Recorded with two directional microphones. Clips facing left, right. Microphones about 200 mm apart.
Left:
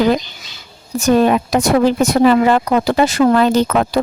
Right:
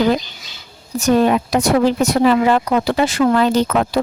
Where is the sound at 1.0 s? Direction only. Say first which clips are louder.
Left 2 dB; 55° left (ahead or behind).